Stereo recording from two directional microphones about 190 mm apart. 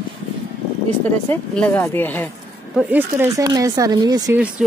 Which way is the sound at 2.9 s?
15° right (ahead or behind).